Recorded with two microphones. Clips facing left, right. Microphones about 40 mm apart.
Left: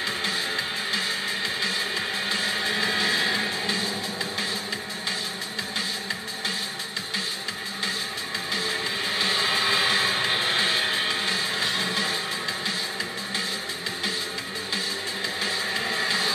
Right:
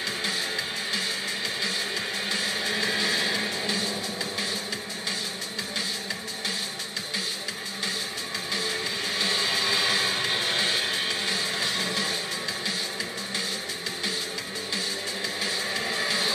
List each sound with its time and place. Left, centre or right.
0.2 s music: centre
8.5 s music: centre
15.4 s music: centre